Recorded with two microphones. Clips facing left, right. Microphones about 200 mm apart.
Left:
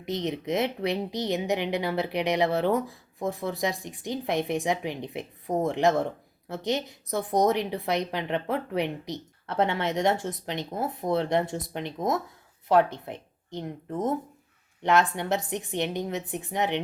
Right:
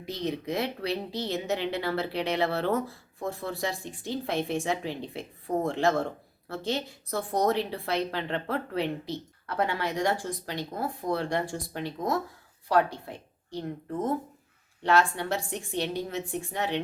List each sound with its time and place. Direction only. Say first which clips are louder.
0.0 s a woman's voice: left 2 dB; 20° left (ahead or behind)